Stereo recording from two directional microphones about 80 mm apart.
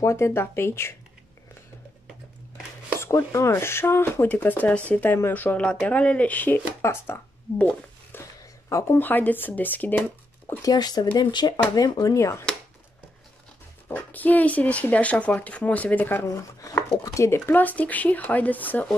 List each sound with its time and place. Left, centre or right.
0.0 s speech: left
3.3 s speech: left
6.8 s speech: left
8.4 s a sound: left
9.0 s speech: left
10.6 s speech: left
11.7 s speech: left
12.2 s speech: left
13.8 s speech: left
17.0 s speech: left